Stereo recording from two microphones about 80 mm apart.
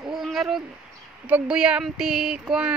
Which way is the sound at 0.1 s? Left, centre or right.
Centre.